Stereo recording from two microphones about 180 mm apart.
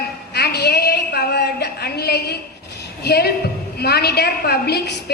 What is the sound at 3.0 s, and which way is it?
A woman's voice, 65° left (ahead or behind).